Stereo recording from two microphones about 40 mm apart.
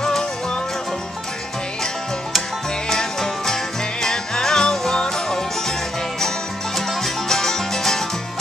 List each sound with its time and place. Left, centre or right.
2.9 s music: centre